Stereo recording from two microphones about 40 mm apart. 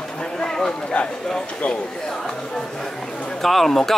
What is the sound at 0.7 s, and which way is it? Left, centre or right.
Speech, left.